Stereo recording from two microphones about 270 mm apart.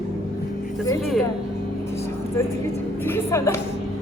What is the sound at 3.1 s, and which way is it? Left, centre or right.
Speech, centre.